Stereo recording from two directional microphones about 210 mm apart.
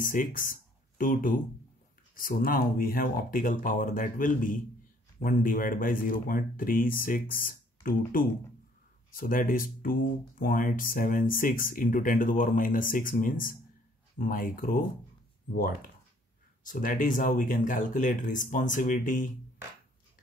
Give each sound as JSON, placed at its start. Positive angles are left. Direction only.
{"t": 0.0, "sound": "speech", "side_deg": 40}
{"t": 16.6, "sound": "speech", "side_deg": 40}